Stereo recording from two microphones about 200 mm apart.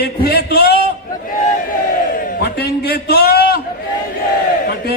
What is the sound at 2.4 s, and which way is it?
A man's voice, 50° left (ahead or behind).